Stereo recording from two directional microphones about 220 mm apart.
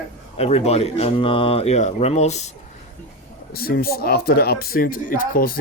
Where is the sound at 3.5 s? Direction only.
40° left (ahead or behind).